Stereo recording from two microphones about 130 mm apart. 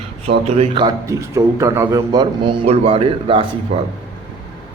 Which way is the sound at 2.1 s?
40° right (ahead or behind).